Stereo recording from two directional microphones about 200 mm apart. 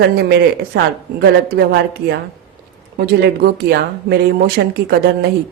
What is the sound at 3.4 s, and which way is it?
A woman's voice, 55° right (ahead or behind).